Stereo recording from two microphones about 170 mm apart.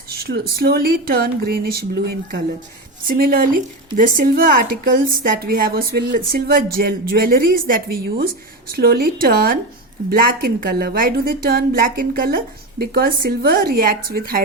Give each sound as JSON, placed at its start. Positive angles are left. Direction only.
{"t": 0.2, "sound": "speech", "side_deg": -65}
{"t": 3.1, "sound": "speech", "side_deg": -60}